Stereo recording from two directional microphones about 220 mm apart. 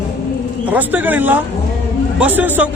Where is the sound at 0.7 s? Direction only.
5° right (ahead or behind).